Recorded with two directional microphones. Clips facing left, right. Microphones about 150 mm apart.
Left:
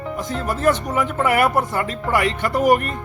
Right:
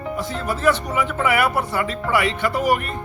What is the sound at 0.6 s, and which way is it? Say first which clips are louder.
Speech: left 1 dB; 45° left (ahead or behind).